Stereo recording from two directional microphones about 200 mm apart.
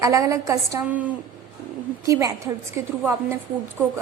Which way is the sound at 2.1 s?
15° right (ahead or behind).